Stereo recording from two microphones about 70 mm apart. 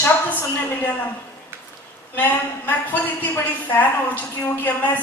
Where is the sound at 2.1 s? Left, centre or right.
Left.